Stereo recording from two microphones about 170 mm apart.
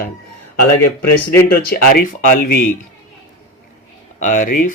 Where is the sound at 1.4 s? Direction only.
65° left (ahead or behind).